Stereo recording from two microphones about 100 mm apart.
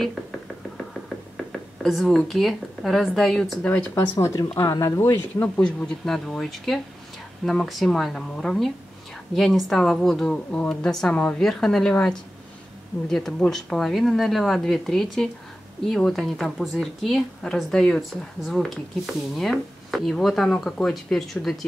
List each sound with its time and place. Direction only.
1.3 s speech: 5° left (ahead or behind)
3.9 s speech: 30° left (ahead or behind)
5.4 s a woman's voice: 10° left (ahead or behind)